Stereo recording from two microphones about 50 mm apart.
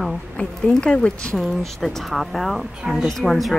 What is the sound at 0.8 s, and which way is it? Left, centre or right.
Speech, left.